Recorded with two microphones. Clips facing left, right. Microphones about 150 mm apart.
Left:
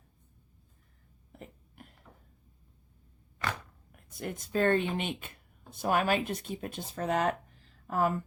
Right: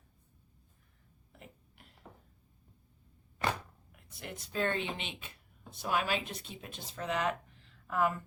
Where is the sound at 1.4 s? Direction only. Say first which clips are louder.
Left 6 dB; 50° left (ahead or behind).